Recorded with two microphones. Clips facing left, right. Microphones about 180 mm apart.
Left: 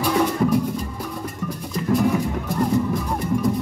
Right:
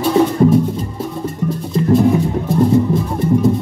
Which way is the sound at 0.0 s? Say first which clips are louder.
Right 7 dB; 25° right (ahead or behind).